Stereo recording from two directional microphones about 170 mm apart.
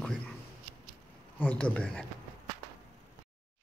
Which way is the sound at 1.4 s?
10° left (ahead or behind).